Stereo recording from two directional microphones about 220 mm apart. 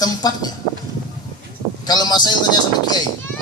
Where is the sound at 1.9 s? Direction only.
20° left (ahead or behind).